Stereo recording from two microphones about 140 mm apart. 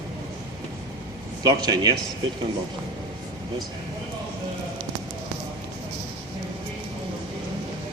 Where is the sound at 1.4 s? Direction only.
30° right (ahead or behind).